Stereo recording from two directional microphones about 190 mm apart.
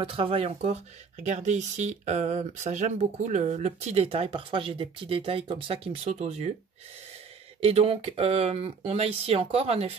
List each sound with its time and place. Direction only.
0.0 s speech: 30° right (ahead or behind)
7.6 s speech: 30° right (ahead or behind)